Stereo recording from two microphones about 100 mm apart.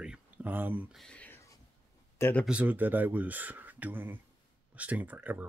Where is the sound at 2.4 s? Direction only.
15° right (ahead or behind).